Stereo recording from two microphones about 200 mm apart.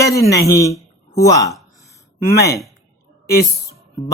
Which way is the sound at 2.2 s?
50° left (ahead or behind).